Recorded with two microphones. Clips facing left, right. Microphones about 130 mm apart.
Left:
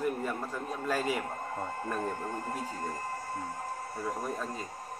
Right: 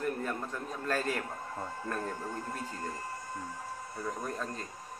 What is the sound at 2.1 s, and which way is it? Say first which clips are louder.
Speech: left 3 dB; 50° left (ahead or behind).